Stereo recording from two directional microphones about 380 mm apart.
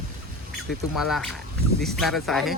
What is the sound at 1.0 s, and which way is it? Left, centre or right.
Speech, centre.